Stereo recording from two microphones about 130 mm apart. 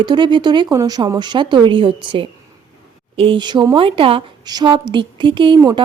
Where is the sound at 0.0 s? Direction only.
35° right (ahead or behind).